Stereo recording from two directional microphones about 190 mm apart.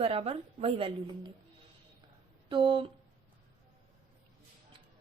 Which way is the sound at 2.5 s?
25° right (ahead or behind).